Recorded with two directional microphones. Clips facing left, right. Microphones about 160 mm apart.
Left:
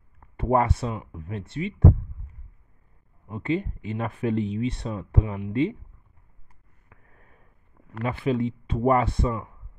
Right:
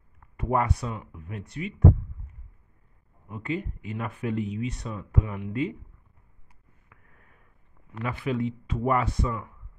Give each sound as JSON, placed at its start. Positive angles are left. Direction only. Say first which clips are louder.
{"t": 0.4, "sound": "speech", "louder": "left 4 dB", "side_deg": 30}
{"t": 3.3, "sound": "speech", "louder": "left 5 dB", "side_deg": 25}
{"t": 6.9, "sound": "a sound", "louder": "left 3 dB", "side_deg": 35}
{"t": 8.0, "sound": "speech", "louder": "left 3 dB", "side_deg": 30}